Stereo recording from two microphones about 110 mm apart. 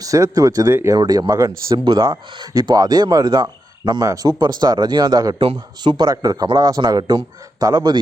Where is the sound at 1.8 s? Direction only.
50° right (ahead or behind).